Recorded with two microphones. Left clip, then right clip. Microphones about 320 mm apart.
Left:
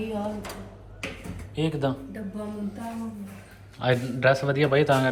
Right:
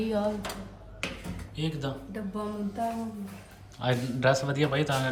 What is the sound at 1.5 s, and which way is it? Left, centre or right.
Speech, centre.